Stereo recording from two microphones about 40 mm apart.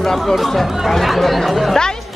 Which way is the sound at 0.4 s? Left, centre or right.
Centre.